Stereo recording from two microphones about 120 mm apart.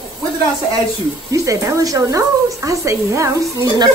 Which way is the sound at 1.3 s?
25° right (ahead or behind).